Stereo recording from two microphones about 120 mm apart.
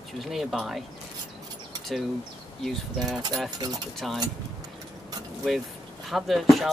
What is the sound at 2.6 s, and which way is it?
Speech, centre (ahead or behind).